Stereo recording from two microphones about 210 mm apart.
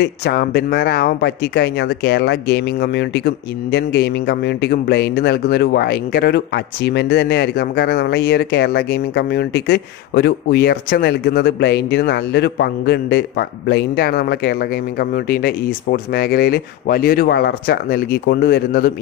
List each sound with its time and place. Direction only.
0.0 s speech: 50° left (ahead or behind)